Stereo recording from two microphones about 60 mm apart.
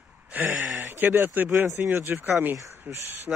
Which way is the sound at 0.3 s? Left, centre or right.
Right.